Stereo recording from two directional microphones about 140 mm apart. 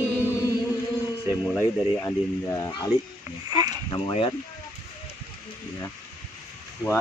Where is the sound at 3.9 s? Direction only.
40° left (ahead or behind).